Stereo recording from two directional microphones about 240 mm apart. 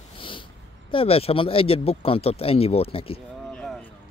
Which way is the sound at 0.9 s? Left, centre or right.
Left.